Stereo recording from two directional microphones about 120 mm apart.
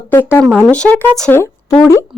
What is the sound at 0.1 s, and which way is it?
Speech, 15° left (ahead or behind).